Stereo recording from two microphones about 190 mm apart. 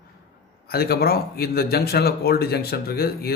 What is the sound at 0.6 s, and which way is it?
Speech, 55° left (ahead or behind).